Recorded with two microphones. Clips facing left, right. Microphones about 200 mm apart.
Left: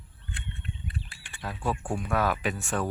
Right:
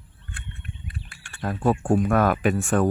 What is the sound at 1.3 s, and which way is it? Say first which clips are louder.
Speech: right 9 dB; 50° right (ahead or behind).